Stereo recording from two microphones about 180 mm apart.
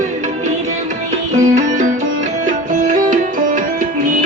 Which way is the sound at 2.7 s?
50° right (ahead or behind).